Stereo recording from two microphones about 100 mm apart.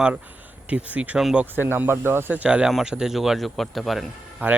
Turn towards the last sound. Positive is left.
turn(degrees=-20)  # may be behind; listen again after turning